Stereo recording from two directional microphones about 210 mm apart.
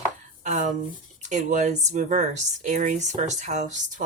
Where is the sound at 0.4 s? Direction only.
35° right (ahead or behind).